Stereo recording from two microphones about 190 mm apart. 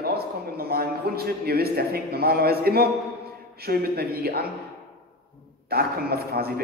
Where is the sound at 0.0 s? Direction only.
55° right (ahead or behind).